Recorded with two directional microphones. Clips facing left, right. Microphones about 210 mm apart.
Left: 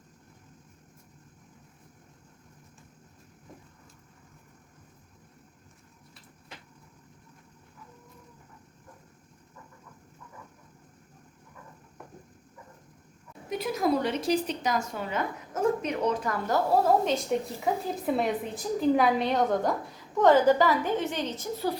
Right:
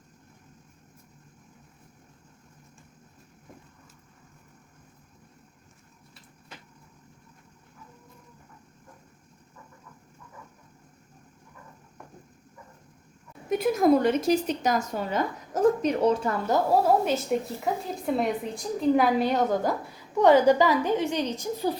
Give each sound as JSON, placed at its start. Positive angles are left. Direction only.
{"t": 13.5, "sound": "a woman's voice", "side_deg": -50}
{"t": 16.8, "sound": "a woman's voice", "side_deg": -10}
{"t": 17.7, "sound": "a woman's voice", "side_deg": 0}